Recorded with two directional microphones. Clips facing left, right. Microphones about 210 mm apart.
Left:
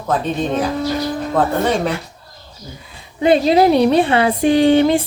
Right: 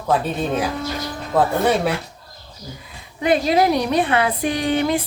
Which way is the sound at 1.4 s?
5° right (ahead or behind).